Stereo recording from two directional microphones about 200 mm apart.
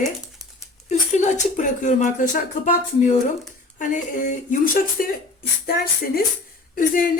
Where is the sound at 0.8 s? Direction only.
35° left (ahead or behind).